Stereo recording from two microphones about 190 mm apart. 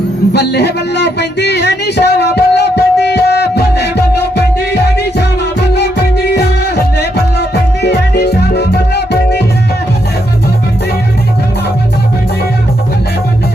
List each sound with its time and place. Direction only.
0.3 s speech: 60° left (ahead or behind)
4.7 s music: 60° left (ahead or behind)